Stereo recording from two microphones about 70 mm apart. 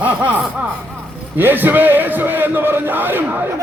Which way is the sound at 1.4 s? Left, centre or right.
Right.